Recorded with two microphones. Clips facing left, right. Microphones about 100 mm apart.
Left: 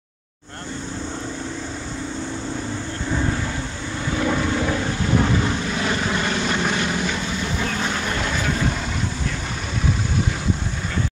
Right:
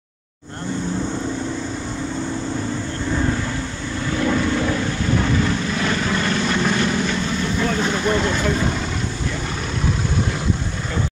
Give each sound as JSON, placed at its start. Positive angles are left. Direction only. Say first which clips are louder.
{"t": 4.2, "sound": "vehicle", "louder": "right 2 dB", "side_deg": 15}